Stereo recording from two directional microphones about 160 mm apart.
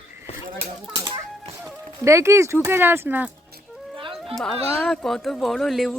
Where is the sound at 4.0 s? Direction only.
35° right (ahead or behind).